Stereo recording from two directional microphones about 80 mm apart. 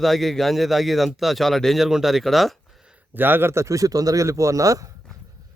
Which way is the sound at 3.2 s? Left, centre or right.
Right.